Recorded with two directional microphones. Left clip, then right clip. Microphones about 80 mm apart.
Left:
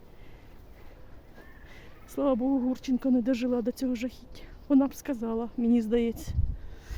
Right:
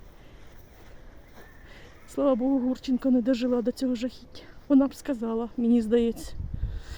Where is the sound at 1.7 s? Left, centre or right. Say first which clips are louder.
Right 3 dB; right.